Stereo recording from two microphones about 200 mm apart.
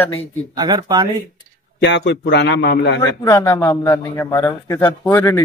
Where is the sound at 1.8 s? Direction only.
60° left (ahead or behind).